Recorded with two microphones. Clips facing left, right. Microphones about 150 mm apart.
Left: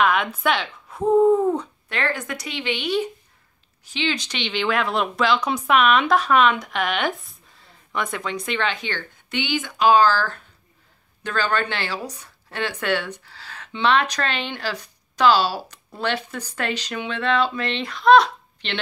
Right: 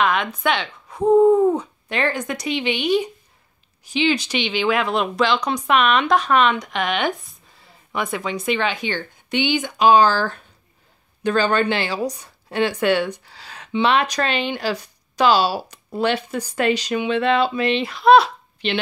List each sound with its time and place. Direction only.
0.0 s speech: 5° left (ahead or behind)
1.2 s speech: 10° right (ahead or behind)
1.9 s speech: 20° right (ahead or behind)